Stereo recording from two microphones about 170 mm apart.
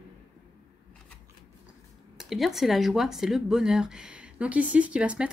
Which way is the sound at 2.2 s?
Centre (ahead or behind).